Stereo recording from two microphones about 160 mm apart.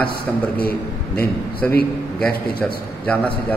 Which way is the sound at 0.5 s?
75° left (ahead or behind).